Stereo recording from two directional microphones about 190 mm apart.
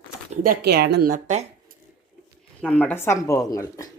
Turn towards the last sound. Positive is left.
turn(degrees=15)  # may be behind; listen again after turning